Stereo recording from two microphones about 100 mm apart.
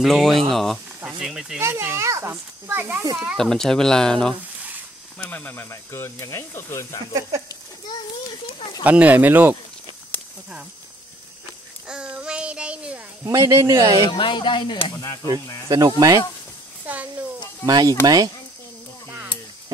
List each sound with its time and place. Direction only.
0.0 s speech: centre (ahead or behind)
1.6 s speech: 25° right (ahead or behind)
3.3 s speech: 5° left (ahead or behind); by 7.0 s 30° left (ahead or behind)
7.4 s children playing: 45° left (ahead or behind)
8.8 s speech: 15° right (ahead or behind)
11.9 s child singing: 10° right (ahead or behind)
13.2 s speech: 30° right (ahead or behind)
13.9 s speech: 55° left (ahead or behind)
15.7 s speech: 35° right (ahead or behind)
16.8 s a sound: 15° right (ahead or behind)
17.6 s speech: 40° right (ahead or behind)